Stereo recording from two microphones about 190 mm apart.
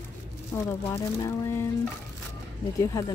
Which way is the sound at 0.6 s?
15° left (ahead or behind).